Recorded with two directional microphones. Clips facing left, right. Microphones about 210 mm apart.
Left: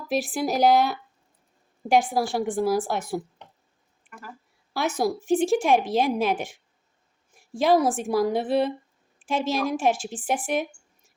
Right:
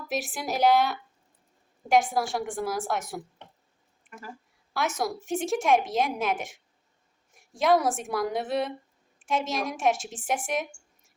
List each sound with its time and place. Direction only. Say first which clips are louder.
0.1 s speech: left 6 dB; 35° left (ahead or behind)
4.7 s speech: left 4 dB; 35° left (ahead or behind)